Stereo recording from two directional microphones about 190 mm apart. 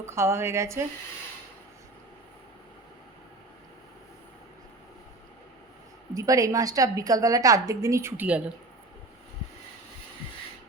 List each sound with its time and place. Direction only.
0.0 s a woman's voice: 15° right (ahead or behind)
6.1 s a woman's voice: 20° right (ahead or behind)